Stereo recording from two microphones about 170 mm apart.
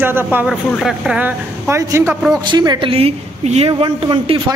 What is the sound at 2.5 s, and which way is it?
A woman's voice, 25° right (ahead or behind).